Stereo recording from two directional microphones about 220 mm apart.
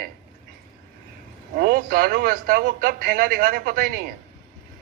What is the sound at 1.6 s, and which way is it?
A man's voice, 40° right (ahead or behind).